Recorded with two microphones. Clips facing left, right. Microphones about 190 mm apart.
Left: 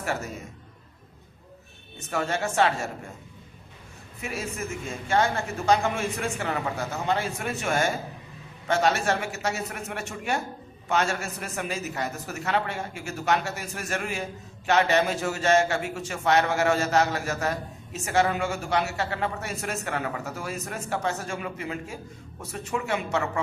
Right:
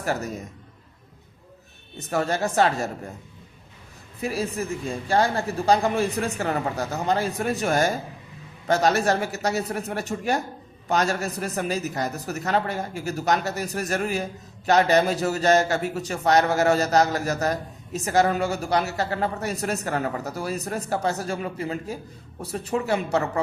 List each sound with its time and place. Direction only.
0.0 s a man's voice: 35° right (ahead or behind)
2.0 s a man's voice: 40° right (ahead or behind)
4.2 s a man's voice: 35° right (ahead or behind)